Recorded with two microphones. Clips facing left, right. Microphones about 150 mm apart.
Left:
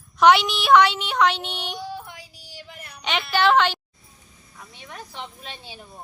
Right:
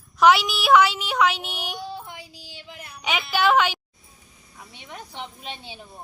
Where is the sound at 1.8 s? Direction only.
20° right (ahead or behind).